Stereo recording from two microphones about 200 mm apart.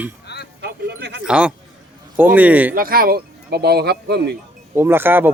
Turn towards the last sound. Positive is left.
turn(degrees=-10)  # may be behind; listen again after turning